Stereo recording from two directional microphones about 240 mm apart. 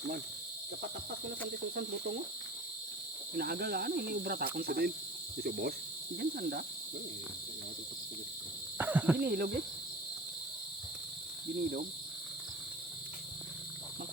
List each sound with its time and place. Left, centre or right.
3.3 s speech: right
8.8 s a sound: centre
9.2 s speech: right